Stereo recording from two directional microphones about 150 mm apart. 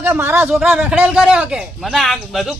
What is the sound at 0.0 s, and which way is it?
A man's voice, 15° right (ahead or behind).